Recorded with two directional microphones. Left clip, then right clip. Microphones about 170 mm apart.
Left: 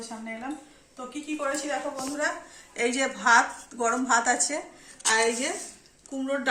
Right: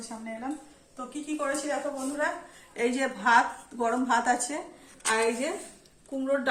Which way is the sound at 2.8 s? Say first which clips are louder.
Left 2 dB; 20° right (ahead or behind).